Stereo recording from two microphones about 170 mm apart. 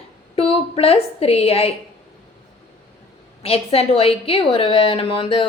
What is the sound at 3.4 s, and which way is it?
A woman's voice, 35° left (ahead or behind).